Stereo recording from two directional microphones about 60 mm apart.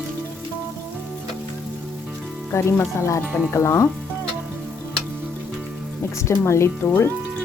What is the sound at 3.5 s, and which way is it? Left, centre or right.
Speech, left.